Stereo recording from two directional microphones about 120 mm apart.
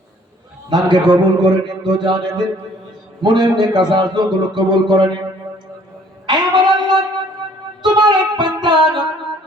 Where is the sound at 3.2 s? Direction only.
35° right (ahead or behind).